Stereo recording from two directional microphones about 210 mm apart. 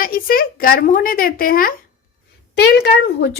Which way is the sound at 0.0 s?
45° left (ahead or behind).